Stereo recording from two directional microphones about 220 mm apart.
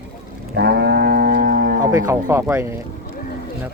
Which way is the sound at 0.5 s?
45° right (ahead or behind).